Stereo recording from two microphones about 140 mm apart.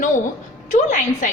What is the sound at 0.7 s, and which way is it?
Speech, 65° left (ahead or behind).